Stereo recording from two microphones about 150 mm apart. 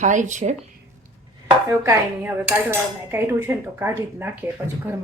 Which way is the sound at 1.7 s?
20° right (ahead or behind).